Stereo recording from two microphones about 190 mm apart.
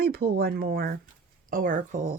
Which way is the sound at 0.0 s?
55° right (ahead or behind).